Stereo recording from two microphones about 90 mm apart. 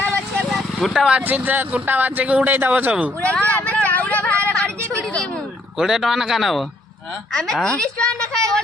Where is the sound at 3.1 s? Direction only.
15° left (ahead or behind).